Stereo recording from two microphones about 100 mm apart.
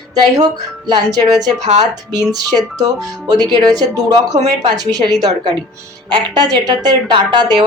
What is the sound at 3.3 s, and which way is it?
A woman's voice, 45° right (ahead or behind).